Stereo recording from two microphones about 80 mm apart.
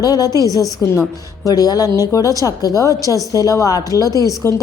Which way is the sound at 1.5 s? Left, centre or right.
Left.